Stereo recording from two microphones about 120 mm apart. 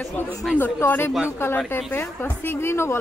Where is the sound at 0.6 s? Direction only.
20° left (ahead or behind).